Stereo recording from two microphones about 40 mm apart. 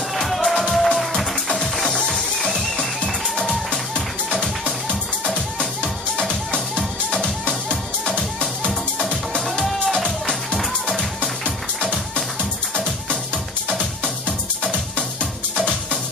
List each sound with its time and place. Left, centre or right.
0.1 s music: centre
1.3 s music: centre
8.0 s music: centre
9.7 s music: centre
14.2 s music: left